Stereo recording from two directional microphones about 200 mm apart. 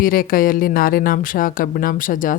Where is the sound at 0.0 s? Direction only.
45° left (ahead or behind).